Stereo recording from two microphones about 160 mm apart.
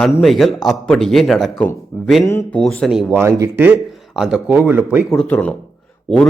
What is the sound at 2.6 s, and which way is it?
Speech, 5° left (ahead or behind).